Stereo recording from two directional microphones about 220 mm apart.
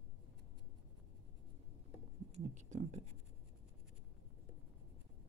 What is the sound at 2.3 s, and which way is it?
Speech, 30° right (ahead or behind).